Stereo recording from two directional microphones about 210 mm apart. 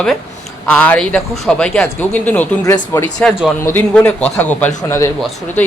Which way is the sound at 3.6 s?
10° left (ahead or behind).